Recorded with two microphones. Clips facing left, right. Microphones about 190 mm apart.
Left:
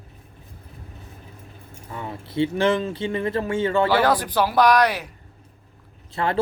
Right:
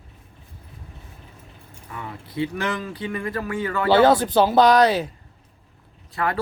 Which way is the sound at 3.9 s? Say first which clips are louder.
Right 4 dB; 25° right (ahead or behind).